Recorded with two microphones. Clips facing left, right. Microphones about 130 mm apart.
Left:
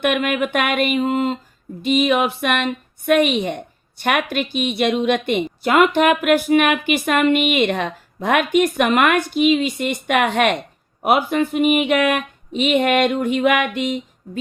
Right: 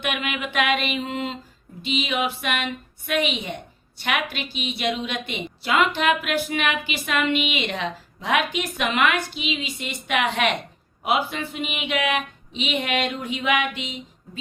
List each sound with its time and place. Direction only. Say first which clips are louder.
0.0 s a woman's voice: left 9 dB; 50° left (ahead or behind)